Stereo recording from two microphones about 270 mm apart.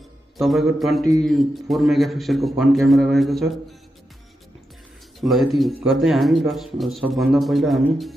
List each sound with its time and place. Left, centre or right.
0.4 s a man's voice: centre
5.2 s a man's voice: centre